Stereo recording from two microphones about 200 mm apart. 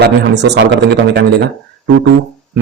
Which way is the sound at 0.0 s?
60° right (ahead or behind).